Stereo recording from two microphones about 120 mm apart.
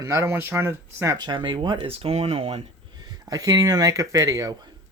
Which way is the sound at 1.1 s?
40° right (ahead or behind).